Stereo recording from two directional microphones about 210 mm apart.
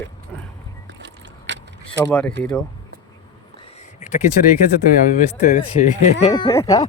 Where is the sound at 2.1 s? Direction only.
5° left (ahead or behind).